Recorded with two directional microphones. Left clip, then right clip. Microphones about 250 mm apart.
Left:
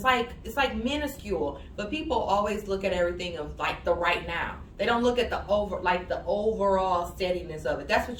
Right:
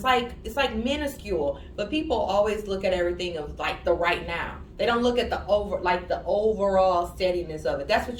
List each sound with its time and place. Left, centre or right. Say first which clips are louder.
0.0 s speech: right 2 dB; centre